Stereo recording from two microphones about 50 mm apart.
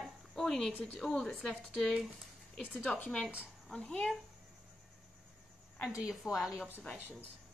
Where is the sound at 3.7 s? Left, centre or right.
Centre.